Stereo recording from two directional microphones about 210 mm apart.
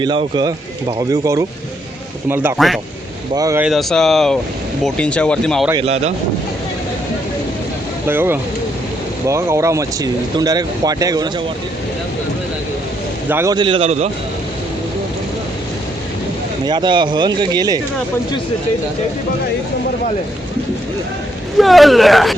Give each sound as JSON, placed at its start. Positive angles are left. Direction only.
{"t": 0.0, "sound": "speech", "side_deg": -20}
{"t": 3.6, "sound": "speech", "side_deg": 0}
{"t": 5.8, "sound": "speech", "side_deg": -30}
{"t": 8.0, "sound": "speech", "side_deg": -10}
{"t": 13.2, "sound": "speech", "side_deg": -10}
{"t": 16.6, "sound": "speech", "side_deg": -20}
{"t": 21.6, "sound": "speech", "side_deg": 0}